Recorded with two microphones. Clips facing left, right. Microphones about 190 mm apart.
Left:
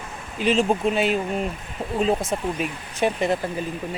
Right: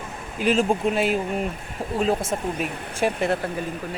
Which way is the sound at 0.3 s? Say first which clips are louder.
Even; 5° right (ahead or behind).